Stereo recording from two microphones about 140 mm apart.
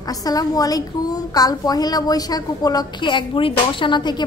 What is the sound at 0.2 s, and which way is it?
A child's voice, 25° left (ahead or behind).